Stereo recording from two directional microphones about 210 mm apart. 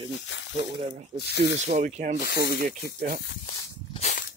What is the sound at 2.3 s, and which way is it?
Speech, 45° right (ahead or behind).